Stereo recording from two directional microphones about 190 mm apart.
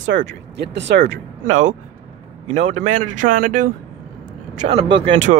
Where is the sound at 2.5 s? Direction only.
40° right (ahead or behind).